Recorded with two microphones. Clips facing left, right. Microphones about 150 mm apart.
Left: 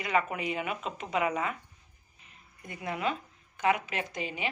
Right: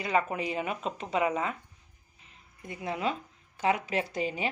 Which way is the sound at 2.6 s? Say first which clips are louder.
Right 1 dB; 25° right (ahead or behind).